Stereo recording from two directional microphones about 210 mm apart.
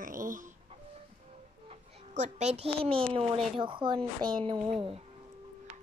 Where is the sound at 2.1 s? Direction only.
35° right (ahead or behind).